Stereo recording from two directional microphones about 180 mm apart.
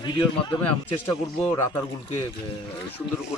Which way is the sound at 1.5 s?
20° left (ahead or behind).